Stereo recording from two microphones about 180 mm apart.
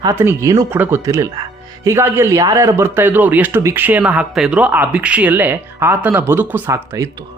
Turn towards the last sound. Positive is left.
turn(degrees=-15)  # may be behind; listen again after turning